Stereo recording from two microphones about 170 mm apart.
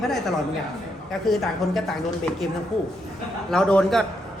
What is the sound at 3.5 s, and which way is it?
Speech, 5° left (ahead or behind).